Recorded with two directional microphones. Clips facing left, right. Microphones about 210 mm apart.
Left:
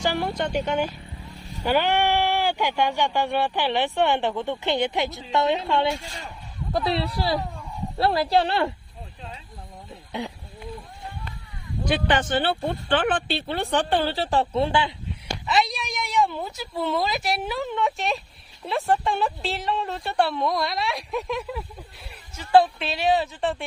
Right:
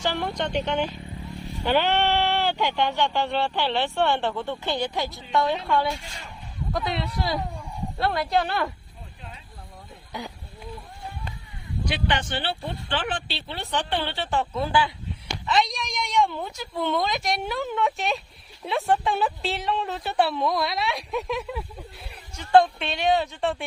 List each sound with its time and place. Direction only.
0.0 s speech: 10° left (ahead or behind); by 8.7 s 30° left (ahead or behind)
10.1 s speech: 25° left (ahead or behind)
11.9 s speech: 50° left (ahead or behind); by 14.9 s 25° left (ahead or behind)
15.4 s speech: 5° left (ahead or behind)